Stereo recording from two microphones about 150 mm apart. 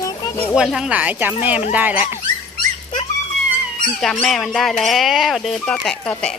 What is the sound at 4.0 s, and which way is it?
Speech, centre (ahead or behind).